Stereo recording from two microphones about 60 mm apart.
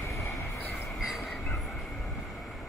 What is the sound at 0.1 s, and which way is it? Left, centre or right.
Train, left.